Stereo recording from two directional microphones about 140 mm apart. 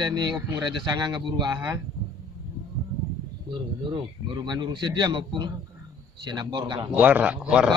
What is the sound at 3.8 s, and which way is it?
A man's voice, 35° right (ahead or behind).